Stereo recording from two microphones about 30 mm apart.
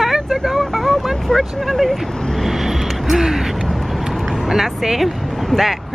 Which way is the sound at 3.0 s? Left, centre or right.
Centre.